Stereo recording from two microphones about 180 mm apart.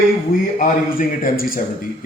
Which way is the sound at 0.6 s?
50° left (ahead or behind).